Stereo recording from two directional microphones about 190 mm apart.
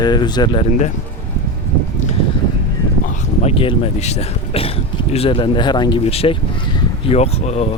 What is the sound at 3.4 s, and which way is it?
Speech, 30° left (ahead or behind).